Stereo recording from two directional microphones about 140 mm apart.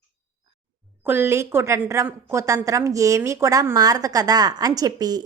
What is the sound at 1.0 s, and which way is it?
A woman's voice, 15° right (ahead or behind).